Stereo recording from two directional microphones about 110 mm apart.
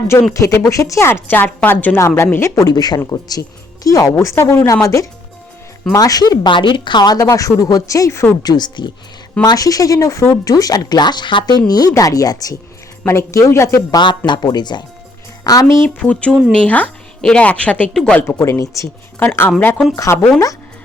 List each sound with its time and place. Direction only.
0.1 s a woman's voice: 25° left (ahead or behind)
2.6 s a woman's voice: 35° left (ahead or behind)
8.4 s a woman's voice: 40° left (ahead or behind)
14.3 s speech: 40° left (ahead or behind)
16.0 s a woman's voice: 10° left (ahead or behind)
18.2 s a woman's voice: 20° left (ahead or behind)
19.2 s a woman's voice: 15° left (ahead or behind)
20.1 s a woman's voice: 25° left (ahead or behind)